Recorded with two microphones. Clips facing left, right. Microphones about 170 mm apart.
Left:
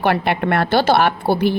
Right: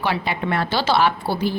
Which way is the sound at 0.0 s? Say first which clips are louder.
Left 6 dB; 55° left (ahead or behind).